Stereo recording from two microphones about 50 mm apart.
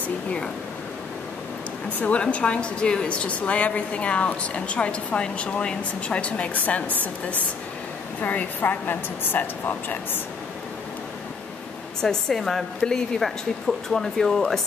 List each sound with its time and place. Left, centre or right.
2.0 s a woman's voice: left
8.2 s a woman's voice: left
12.0 s a woman's voice: centre
12.8 s a woman's voice: centre